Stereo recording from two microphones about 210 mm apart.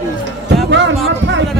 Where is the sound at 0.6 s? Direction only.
60° right (ahead or behind).